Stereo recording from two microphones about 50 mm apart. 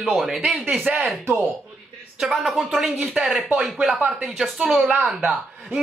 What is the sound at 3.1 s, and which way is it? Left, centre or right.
Speech, centre.